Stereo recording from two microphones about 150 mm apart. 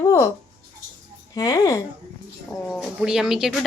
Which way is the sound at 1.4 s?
25° left (ahead or behind).